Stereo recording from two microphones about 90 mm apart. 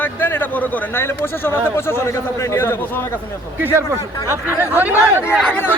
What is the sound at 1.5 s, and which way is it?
Speech, 25° left (ahead or behind).